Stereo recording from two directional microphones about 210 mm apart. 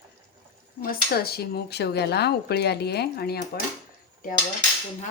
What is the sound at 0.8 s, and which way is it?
Speech, 45° left (ahead or behind).